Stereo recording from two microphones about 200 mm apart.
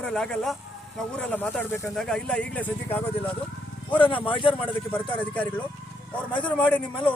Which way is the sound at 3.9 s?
25° left (ahead or behind).